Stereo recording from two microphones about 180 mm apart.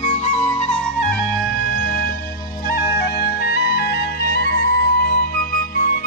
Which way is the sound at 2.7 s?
60° left (ahead or behind).